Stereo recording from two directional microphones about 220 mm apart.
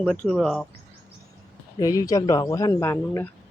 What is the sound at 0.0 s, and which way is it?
Speech, 5° left (ahead or behind).